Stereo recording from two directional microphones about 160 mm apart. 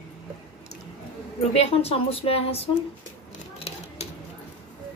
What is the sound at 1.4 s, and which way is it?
A woman's voice, 40° left (ahead or behind).